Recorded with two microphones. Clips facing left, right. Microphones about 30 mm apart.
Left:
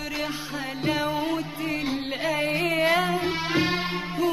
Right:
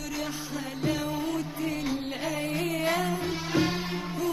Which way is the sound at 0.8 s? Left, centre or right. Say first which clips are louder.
Left 4 dB; left.